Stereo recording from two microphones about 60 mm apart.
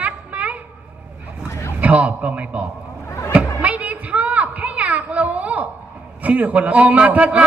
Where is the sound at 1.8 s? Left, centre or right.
Right.